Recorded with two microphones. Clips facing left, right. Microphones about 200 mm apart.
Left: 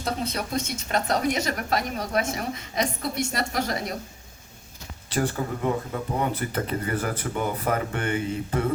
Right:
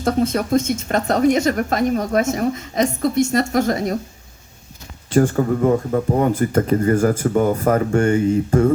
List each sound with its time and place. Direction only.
0.0 s speech: 50° right (ahead or behind)
5.0 s speech: 45° right (ahead or behind)